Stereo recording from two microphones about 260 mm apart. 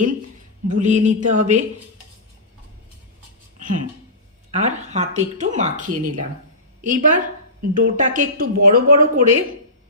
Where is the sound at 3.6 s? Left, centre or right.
Right.